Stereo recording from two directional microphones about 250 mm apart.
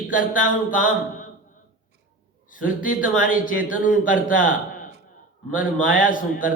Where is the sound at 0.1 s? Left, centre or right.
Left.